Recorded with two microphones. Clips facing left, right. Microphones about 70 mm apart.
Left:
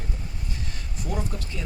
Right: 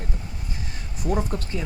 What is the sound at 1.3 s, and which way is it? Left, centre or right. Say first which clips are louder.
Speech: right 6 dB; right.